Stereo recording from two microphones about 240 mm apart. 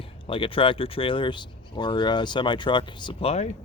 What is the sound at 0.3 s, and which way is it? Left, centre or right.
Speech, left.